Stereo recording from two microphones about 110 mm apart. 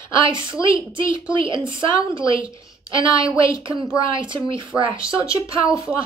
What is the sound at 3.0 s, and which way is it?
A woman's voice, 55° right (ahead or behind).